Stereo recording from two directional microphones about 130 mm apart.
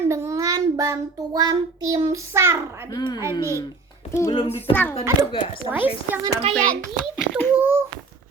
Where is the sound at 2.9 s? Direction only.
30° left (ahead or behind).